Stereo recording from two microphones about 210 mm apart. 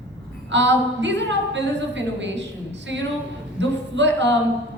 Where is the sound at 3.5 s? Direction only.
60° right (ahead or behind).